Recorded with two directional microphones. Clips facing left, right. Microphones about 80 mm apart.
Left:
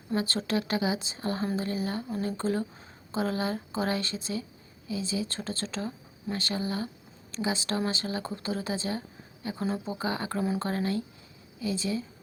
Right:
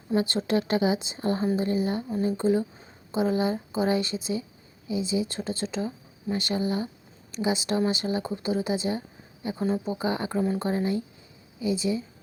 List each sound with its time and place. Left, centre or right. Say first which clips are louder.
0.2 s speech: right 5 dB; right
2.2 s speech: right 7 dB; centre
9.6 s speech: right 4 dB; centre
9.8 s speech: right 4 dB; right
10.3 s speech: right 3 dB; centre
10.6 s speech: right 3 dB; centre